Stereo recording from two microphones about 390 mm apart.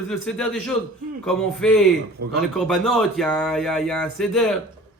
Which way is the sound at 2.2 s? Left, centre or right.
Right.